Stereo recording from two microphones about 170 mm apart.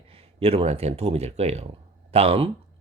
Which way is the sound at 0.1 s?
35° right (ahead or behind).